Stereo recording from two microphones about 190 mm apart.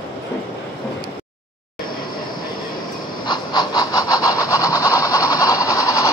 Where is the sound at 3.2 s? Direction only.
25° left (ahead or behind).